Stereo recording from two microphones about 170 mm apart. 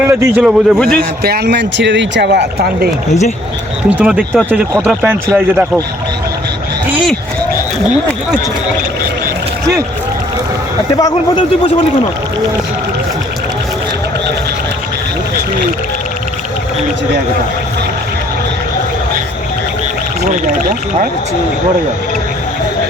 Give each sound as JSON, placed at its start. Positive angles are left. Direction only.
{"t": 0.0, "sound": "speech", "side_deg": -15}
{"t": 1.2, "sound": "speech", "side_deg": -70}
{"t": 3.8, "sound": "speech", "side_deg": -5}
{"t": 10.9, "sound": "speech", "side_deg": 20}
{"t": 20.3, "sound": "speech", "side_deg": -55}